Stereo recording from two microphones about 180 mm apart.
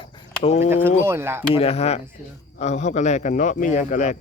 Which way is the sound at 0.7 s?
10° right (ahead or behind).